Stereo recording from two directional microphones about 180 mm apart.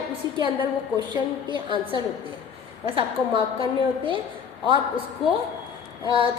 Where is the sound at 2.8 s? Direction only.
30° right (ahead or behind).